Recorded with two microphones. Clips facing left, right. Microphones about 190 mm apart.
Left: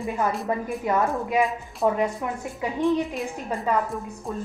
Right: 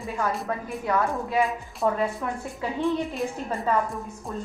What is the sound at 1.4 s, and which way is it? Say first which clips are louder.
Speech: even; centre (ahead or behind).